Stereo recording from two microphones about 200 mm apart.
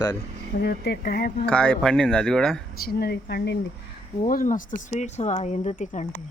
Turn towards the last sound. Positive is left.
turn(degrees=35)  # may be behind; listen again after turning